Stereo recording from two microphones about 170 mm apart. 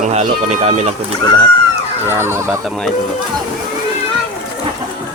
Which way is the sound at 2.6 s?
Centre (ahead or behind).